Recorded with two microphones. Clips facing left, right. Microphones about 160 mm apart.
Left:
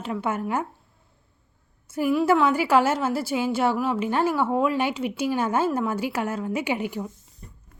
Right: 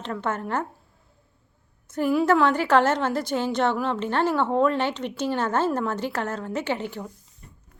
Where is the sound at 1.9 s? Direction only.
5° left (ahead or behind).